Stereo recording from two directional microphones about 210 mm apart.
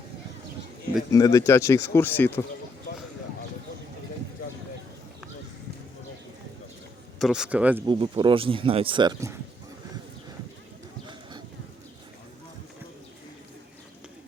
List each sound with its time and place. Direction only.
1.1 s speech: 15° left (ahead or behind)
7.2 s a man's voice: centre (ahead or behind)
7.9 s speech: 25° right (ahead or behind)